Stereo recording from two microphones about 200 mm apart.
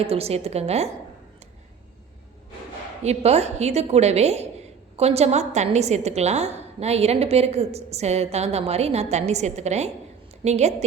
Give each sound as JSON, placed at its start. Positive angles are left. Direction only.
{"t": 0.0, "sound": "a woman's voice", "side_deg": -30}
{"t": 3.0, "sound": "a woman's voice", "side_deg": -35}